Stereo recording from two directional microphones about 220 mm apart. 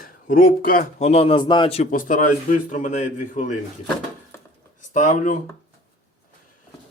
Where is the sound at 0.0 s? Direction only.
40° left (ahead or behind).